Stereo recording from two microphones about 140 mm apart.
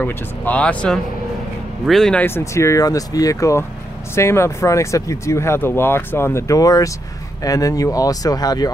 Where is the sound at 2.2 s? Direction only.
20° left (ahead or behind).